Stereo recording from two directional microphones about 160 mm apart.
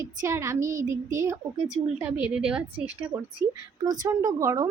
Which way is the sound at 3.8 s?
25° right (ahead or behind).